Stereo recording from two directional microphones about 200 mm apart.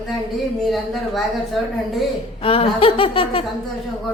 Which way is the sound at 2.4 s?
30° left (ahead or behind).